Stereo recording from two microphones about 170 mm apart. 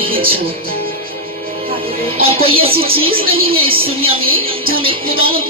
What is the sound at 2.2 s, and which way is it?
Speech, 35° right (ahead or behind).